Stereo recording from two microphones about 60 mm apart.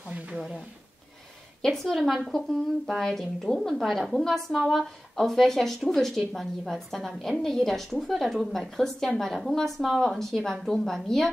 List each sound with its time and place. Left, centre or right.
0.1 s speech: centre
1.6 s a woman's voice: centre